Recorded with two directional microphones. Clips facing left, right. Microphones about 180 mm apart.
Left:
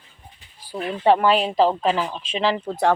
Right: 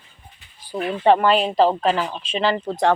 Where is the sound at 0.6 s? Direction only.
10° left (ahead or behind).